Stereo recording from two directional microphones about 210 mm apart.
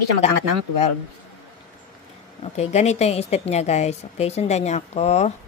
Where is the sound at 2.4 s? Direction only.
30° left (ahead or behind).